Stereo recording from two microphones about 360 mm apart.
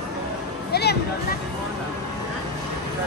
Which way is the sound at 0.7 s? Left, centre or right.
Left.